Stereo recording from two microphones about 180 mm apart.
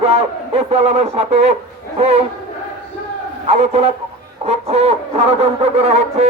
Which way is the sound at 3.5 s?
35° right (ahead or behind).